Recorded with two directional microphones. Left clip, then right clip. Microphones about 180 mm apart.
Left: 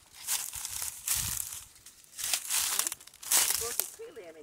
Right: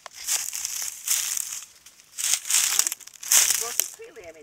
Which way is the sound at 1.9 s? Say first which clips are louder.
Right 5 dB; 30° right (ahead or behind).